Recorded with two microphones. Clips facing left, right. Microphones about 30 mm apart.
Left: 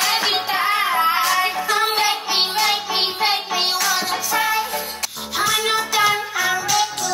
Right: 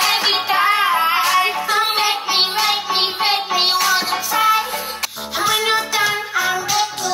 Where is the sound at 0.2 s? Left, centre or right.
Centre.